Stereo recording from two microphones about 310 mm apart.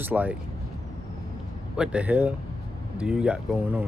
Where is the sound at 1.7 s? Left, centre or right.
Centre.